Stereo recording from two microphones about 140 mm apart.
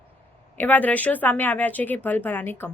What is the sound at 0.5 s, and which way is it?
A woman's voice, 10° left (ahead or behind).